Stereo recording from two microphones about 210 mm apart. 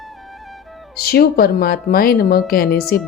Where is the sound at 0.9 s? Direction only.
50° left (ahead or behind).